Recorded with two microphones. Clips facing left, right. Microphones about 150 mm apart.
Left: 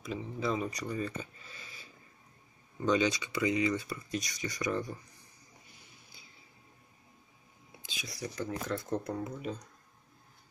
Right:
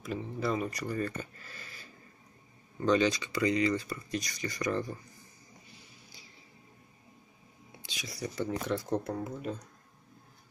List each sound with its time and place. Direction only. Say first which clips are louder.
0.0 s speech: right 1 dB; 5° right (ahead or behind)
2.8 s speech: right 2 dB; 5° left (ahead or behind)
3.2 s speech: right 2 dB; 20° left (ahead or behind)
3.9 s speech: right 1 dB; centre (ahead or behind)
8.0 s speech: right 3 dB; centre (ahead or behind)